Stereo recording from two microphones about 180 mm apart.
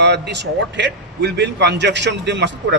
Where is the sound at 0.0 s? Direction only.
70° right (ahead or behind).